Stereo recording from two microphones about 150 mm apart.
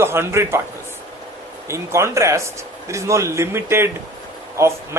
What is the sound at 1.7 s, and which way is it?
A man's voice, 20° right (ahead or behind).